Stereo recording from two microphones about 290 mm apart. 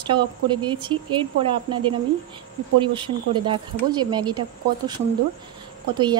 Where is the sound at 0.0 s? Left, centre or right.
Centre.